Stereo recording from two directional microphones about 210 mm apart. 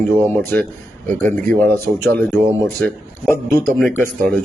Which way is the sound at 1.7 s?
10° left (ahead or behind).